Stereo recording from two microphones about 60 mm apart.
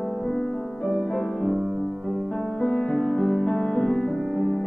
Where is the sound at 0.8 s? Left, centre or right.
Centre.